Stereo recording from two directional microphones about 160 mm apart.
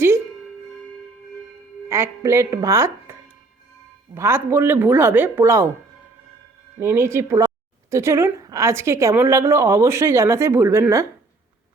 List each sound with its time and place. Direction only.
1.9 s speech: 15° right (ahead or behind)
6.7 s speech: 15° right (ahead or behind)